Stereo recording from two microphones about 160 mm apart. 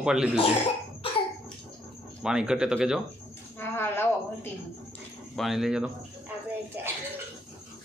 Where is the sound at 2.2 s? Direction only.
5° right (ahead or behind).